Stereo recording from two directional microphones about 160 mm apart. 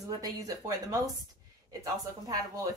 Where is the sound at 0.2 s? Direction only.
20° right (ahead or behind).